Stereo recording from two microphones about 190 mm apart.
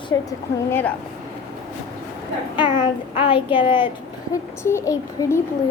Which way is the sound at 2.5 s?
25° left (ahead or behind).